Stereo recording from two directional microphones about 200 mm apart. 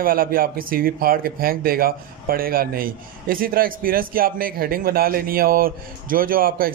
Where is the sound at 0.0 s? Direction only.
45° right (ahead or behind).